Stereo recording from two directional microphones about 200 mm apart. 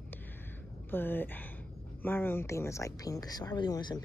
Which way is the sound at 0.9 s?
10° left (ahead or behind).